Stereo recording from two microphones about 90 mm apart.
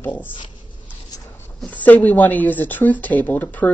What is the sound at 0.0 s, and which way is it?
Speech, 20° left (ahead or behind).